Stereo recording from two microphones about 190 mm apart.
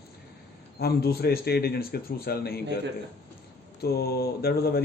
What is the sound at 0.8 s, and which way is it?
Speech, 55° left (ahead or behind).